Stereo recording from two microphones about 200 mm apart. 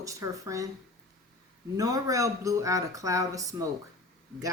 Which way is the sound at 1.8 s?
15° right (ahead or behind).